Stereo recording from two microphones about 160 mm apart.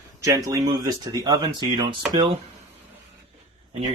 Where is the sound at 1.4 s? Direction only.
35° right (ahead or behind).